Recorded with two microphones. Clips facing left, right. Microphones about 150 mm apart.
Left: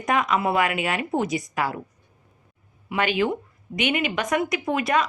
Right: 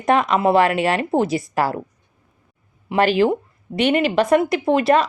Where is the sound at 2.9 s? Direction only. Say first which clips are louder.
Right 7 dB; 35° right (ahead or behind).